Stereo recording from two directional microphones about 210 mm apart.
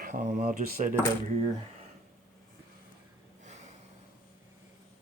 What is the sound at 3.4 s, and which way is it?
Snort, 30° right (ahead or behind).